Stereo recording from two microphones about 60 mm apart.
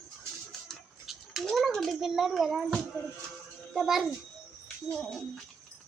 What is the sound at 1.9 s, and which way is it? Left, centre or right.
A child's voice, centre.